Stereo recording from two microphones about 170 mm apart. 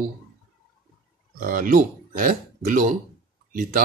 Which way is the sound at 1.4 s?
55° right (ahead or behind).